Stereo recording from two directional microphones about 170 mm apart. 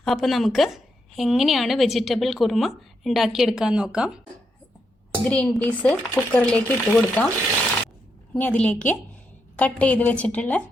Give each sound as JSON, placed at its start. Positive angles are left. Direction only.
{"t": 0.0, "sound": "a woman's voice", "side_deg": 0}
{"t": 5.3, "sound": "speech", "side_deg": 5}